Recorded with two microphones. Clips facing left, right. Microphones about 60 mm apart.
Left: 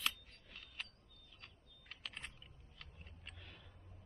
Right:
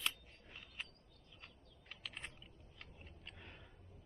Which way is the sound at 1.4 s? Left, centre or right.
Centre.